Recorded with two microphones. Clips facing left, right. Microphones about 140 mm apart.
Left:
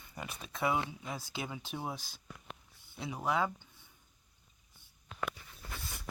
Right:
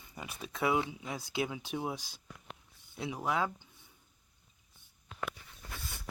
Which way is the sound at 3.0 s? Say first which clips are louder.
Even; 5° right (ahead or behind).